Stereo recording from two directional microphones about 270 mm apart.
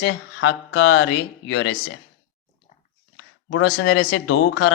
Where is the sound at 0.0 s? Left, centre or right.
Left.